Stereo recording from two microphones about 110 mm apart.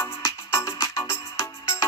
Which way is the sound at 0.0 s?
25° left (ahead or behind).